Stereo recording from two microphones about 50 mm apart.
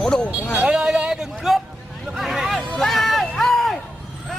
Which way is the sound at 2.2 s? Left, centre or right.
Centre.